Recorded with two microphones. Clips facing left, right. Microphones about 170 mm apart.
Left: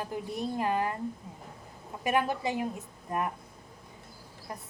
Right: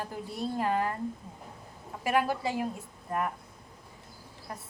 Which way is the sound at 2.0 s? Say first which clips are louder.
Even; 20° left (ahead or behind).